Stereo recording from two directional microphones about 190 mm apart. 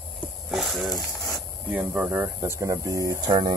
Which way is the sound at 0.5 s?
Centre (ahead or behind).